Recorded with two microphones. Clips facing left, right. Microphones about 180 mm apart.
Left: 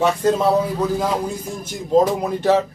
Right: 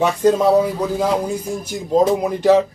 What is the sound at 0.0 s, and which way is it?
Speech, 15° right (ahead or behind).